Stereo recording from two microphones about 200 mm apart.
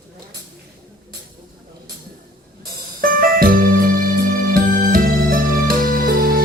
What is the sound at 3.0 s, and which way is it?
Music, 45° right (ahead or behind).